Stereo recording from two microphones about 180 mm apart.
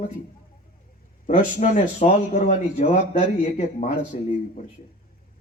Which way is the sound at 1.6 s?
40° left (ahead or behind).